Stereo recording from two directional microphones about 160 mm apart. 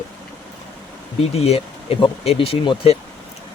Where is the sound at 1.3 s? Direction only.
40° left (ahead or behind).